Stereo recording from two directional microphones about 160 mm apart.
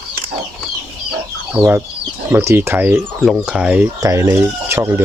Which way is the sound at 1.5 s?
10° right (ahead or behind).